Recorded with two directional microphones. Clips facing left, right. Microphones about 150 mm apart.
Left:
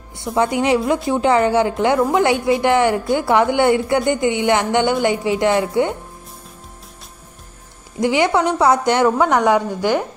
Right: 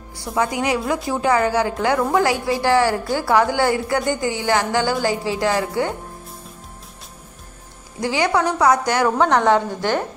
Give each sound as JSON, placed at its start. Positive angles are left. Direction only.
{"t": 0.4, "sound": "a woman's voice", "side_deg": 25}
{"t": 8.0, "sound": "a woman's voice", "side_deg": 20}